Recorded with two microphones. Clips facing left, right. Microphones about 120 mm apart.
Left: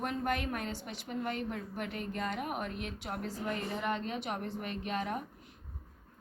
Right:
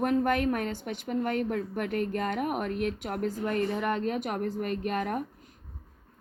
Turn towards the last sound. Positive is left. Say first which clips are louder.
# right 6 dB
turn(degrees=-50)  # may be behind; listen again after turning